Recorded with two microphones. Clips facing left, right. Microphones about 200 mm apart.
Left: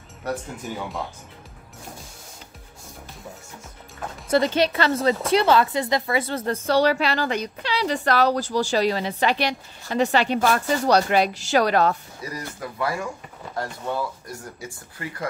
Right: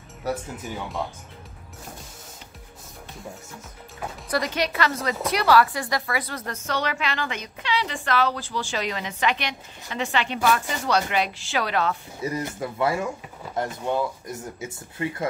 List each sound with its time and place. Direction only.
0.2 s speech: 5° right (ahead or behind)
4.3 s a woman's voice: 30° left (ahead or behind)
12.2 s speech: 25° right (ahead or behind)